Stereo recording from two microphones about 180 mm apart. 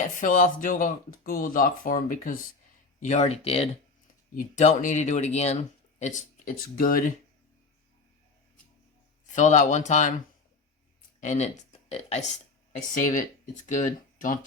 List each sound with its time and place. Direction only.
0.2 s speech: 45° left (ahead or behind)
3.0 s speech: 40° left (ahead or behind)
9.3 s speech: 40° left (ahead or behind)
11.2 s speech: 40° left (ahead or behind)